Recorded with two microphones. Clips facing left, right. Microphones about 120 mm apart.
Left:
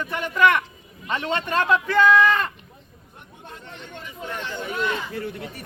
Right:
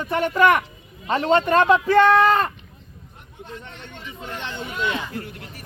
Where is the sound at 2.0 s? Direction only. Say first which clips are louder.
Right 2 dB; 40° right (ahead or behind).